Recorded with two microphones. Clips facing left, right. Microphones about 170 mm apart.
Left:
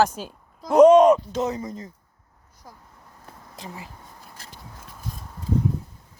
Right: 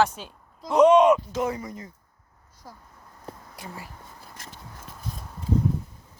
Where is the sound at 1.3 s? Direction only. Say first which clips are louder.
Left 2 dB; 25° left (ahead or behind).